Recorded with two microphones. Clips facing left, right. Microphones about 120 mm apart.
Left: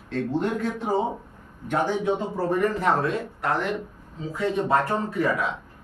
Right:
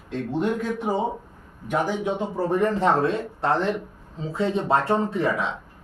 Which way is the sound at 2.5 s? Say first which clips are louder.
Right 2 dB; 25° right (ahead or behind).